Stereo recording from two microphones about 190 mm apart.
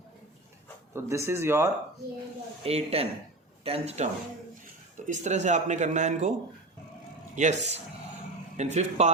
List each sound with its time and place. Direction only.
0.9 s speech: 15° right (ahead or behind)
2.6 s speech: 30° right (ahead or behind)
7.3 s speech: 40° right (ahead or behind)